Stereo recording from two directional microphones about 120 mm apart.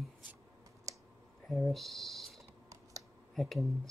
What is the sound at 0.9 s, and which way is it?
Computer keyboard, 30° right (ahead or behind).